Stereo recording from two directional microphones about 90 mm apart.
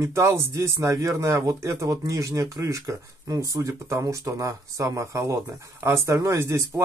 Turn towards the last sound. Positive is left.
turn(degrees=-35)  # may be behind; listen again after turning